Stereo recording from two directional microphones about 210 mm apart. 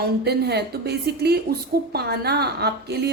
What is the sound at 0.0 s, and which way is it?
A woman's voice, 50° right (ahead or behind).